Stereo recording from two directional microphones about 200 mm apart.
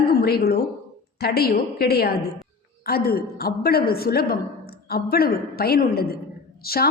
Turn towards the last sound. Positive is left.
turn(degrees=50)  # may be behind; listen again after turning